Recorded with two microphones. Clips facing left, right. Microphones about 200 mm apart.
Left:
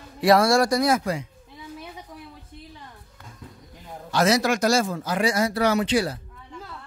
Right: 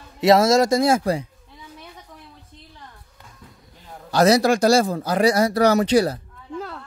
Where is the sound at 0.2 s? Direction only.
25° right (ahead or behind).